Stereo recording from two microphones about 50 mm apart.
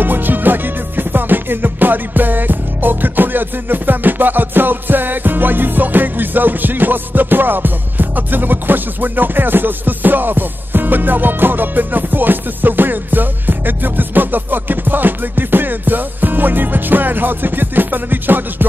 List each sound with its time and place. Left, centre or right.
0.0 s music: right